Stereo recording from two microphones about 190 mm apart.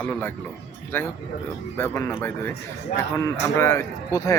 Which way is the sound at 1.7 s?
10° left (ahead or behind).